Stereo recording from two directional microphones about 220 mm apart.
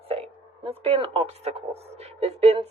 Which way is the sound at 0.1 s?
25° right (ahead or behind).